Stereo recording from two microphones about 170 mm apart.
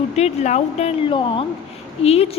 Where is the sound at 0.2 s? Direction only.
40° left (ahead or behind).